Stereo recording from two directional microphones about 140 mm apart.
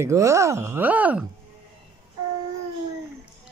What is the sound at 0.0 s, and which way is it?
Speech, 20° right (ahead or behind).